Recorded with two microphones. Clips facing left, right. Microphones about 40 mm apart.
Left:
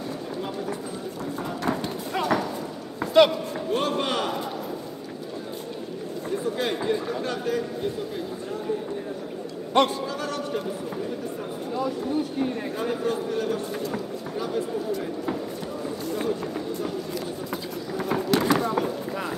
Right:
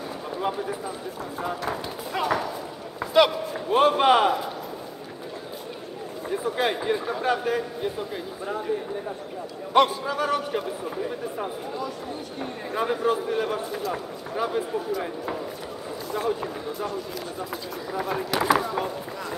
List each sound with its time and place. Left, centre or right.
0.4 s speech: centre
1.6 s clip-clop: centre
3.0 s a sound: centre
3.7 s a man's voice: right
6.3 s a man's voice: centre
10.0 s a man's voice: centre
12.7 s a man's voice: centre
16.3 s speech: centre
17.5 s a sound: centre